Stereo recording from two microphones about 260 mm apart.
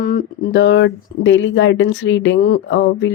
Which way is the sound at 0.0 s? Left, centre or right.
Left.